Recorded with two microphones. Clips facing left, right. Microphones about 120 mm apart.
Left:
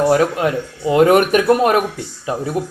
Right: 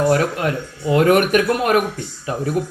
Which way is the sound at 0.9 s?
35° left (ahead or behind).